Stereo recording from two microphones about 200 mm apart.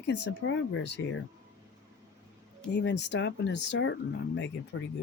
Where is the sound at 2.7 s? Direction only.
60° left (ahead or behind).